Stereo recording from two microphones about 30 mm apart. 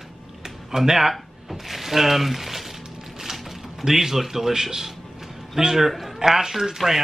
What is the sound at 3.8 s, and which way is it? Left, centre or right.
Speech, centre.